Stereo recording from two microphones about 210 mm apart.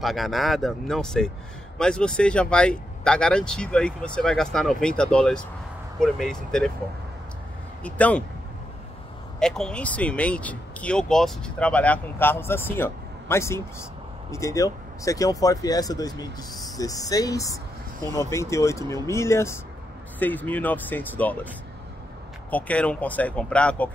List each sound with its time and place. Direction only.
0.0 s speech: centre (ahead or behind)
7.8 s speech: 5° left (ahead or behind)
9.4 s speech: 5° left (ahead or behind)
22.5 s speech: 5° left (ahead or behind)